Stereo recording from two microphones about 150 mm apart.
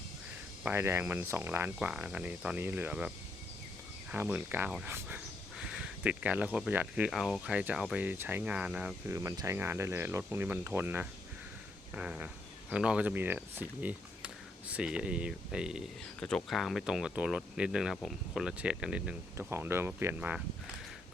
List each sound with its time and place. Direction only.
0.6 s speech: 15° right (ahead or behind)
4.1 s speech: 10° right (ahead or behind)
9.0 s speech: 20° right (ahead or behind)